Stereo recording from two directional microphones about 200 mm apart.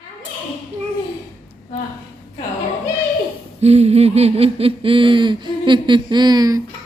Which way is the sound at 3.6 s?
30° right (ahead or behind).